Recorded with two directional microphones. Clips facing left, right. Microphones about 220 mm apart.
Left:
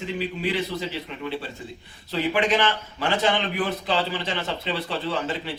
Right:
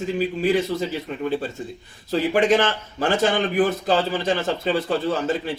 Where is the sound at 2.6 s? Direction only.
45° right (ahead or behind).